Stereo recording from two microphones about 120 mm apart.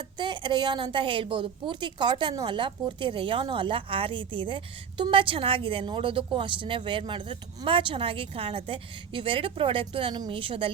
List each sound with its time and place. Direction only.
0.0 s a woman's voice: 40° right (ahead or behind)